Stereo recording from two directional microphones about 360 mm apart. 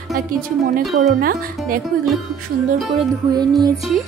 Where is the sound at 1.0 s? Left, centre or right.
Right.